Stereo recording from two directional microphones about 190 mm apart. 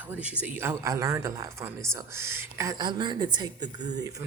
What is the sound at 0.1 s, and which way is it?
A woman's voice, 5° right (ahead or behind).